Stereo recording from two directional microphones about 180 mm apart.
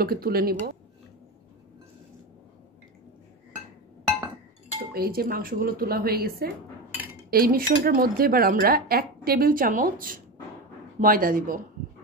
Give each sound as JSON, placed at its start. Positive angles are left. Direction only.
{"t": 0.0, "sound": "speech", "side_deg": -55}
{"t": 4.9, "sound": "speech", "side_deg": -55}